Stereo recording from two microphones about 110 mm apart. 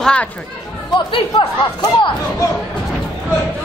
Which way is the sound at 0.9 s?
50° left (ahead or behind).